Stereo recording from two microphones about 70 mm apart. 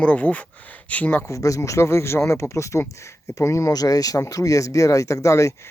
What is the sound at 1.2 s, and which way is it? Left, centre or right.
Speech, left.